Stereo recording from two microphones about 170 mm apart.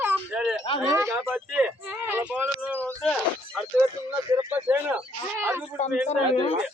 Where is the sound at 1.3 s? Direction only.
5° right (ahead or behind).